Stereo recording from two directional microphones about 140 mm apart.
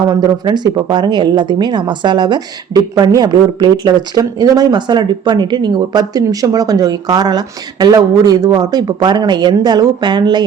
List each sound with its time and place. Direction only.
0.0 s speech: 30° right (ahead or behind)